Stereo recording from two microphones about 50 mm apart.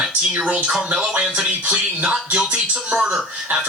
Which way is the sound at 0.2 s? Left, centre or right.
Centre.